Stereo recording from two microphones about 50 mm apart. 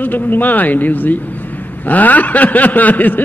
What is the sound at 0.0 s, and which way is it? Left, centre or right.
A man's voice, left.